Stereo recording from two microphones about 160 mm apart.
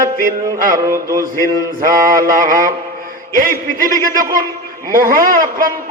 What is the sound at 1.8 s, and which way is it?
Mantra, 60° right (ahead or behind).